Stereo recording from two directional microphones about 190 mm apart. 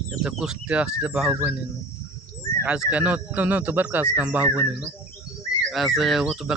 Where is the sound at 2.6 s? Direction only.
5° right (ahead or behind).